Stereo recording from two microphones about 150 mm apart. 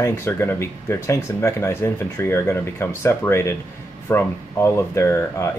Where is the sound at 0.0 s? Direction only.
15° left (ahead or behind).